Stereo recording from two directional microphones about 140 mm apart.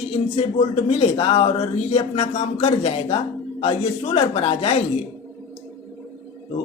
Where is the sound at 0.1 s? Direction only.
45° left (ahead or behind).